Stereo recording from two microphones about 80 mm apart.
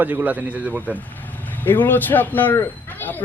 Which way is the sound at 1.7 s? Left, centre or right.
Left.